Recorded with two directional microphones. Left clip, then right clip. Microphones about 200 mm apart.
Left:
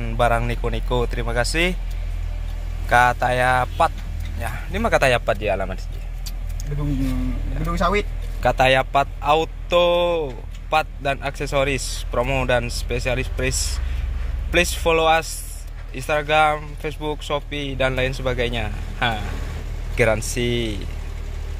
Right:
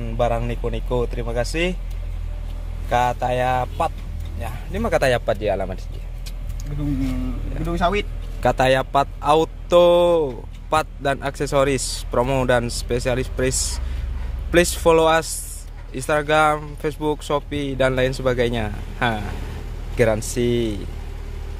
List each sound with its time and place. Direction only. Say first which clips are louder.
0.0 s speech: left 2 dB; 10° right (ahead or behind)
2.9 s speech: left 3 dB; 10° right (ahead or behind)
8.4 s speech: left 1 dB; 30° right (ahead or behind)
20.0 s speech: even; 25° right (ahead or behind)